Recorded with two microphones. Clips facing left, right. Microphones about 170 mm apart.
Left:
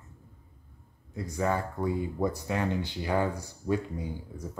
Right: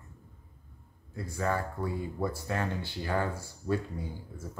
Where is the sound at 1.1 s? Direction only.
20° left (ahead or behind).